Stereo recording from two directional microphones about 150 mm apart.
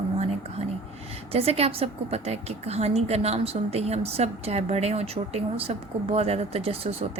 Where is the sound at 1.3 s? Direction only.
40° right (ahead or behind).